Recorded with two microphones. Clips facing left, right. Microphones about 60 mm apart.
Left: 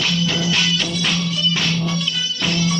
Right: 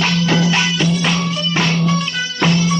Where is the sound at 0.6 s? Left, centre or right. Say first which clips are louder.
Right 4 dB; right.